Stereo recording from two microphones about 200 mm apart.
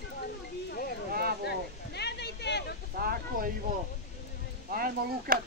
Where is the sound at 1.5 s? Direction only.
55° left (ahead or behind).